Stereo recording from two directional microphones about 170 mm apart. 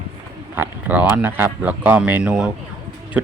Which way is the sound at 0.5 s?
10° right (ahead or behind).